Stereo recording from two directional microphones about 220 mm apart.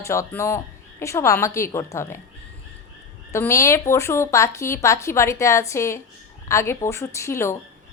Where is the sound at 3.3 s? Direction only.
15° left (ahead or behind).